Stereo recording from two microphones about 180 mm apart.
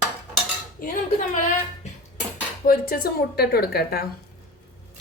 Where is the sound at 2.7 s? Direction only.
55° left (ahead or behind).